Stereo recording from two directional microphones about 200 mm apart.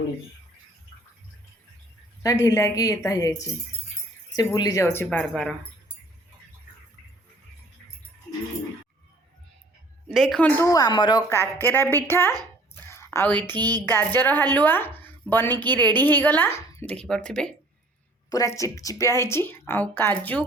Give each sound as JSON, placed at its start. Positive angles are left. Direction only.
{"t": 2.2, "sound": "speech", "side_deg": 15}
{"t": 4.4, "sound": "speech", "side_deg": 20}
{"t": 5.0, "sound": "speech", "side_deg": 0}
{"t": 10.1, "sound": "speech", "side_deg": 0}
{"t": 10.6, "sound": "speech", "side_deg": 15}
{"t": 12.9, "sound": "a sound", "side_deg": 15}
{"t": 13.3, "sound": "a woman's voice", "side_deg": -20}
{"t": 13.8, "sound": "a woman's voice", "side_deg": 10}
{"t": 18.3, "sound": "speech", "side_deg": 15}